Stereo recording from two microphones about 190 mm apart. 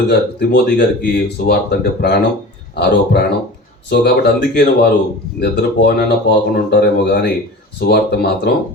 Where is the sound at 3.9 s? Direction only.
60° left (ahead or behind).